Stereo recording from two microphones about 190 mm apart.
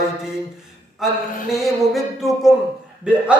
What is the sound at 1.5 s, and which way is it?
Speech, centre (ahead or behind).